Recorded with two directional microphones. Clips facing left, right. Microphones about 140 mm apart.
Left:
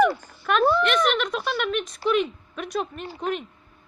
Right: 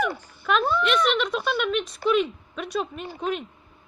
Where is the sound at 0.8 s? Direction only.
Centre (ahead or behind).